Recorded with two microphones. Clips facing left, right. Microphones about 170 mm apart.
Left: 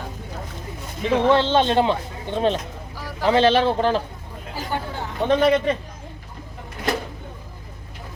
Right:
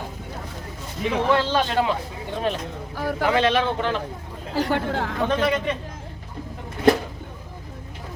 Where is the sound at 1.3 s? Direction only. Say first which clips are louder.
Left 3 dB; 25° left (ahead or behind).